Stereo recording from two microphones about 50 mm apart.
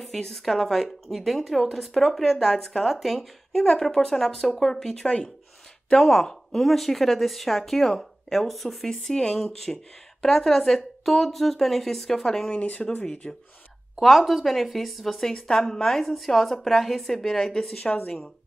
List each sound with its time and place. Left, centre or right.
0.0 s a woman's voice: centre
5.9 s a woman's voice: centre
12.4 s speech: left
13.0 s speech: centre
13.9 s a woman's voice: centre